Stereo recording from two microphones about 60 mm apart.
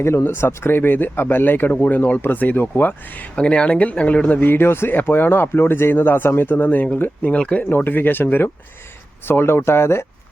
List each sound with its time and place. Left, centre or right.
0.0 s speech: left; by 4.4 s centre
4.4 s speech: left
7.8 s speech: left